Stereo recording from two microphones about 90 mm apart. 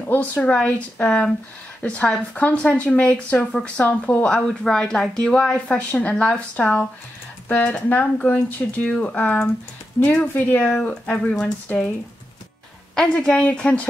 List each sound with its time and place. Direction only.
0.1 s speech: 20° left (ahead or behind)
12.9 s speech: 10° left (ahead or behind)